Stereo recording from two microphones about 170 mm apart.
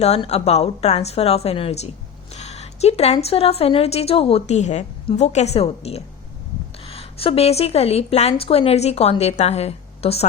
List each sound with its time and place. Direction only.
0.0 s a woman's voice: 35° left (ahead or behind)